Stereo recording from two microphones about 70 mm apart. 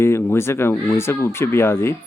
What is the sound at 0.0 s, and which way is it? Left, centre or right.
Speech, left.